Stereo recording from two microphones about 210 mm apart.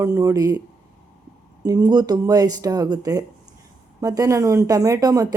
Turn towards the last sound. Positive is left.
turn(degrees=-15)  # may be behind; listen again after turning